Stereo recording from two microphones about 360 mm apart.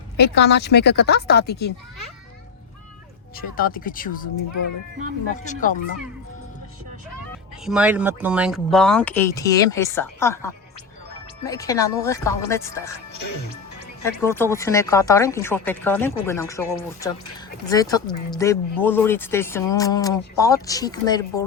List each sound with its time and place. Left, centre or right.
0.2 s speech: left
3.3 s speech: left
5.3 s speech: left
7.6 s speech: centre
14.0 s speech: centre